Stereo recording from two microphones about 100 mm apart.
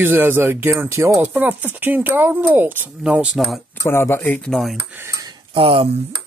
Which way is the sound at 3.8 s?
25° left (ahead or behind).